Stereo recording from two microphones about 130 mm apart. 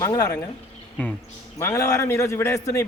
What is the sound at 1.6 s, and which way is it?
A man's voice, 20° left (ahead or behind).